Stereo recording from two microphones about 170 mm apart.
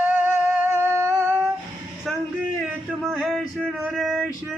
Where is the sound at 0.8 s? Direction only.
15° right (ahead or behind).